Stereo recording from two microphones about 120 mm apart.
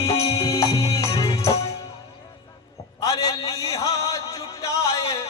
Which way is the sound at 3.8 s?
30° left (ahead or behind).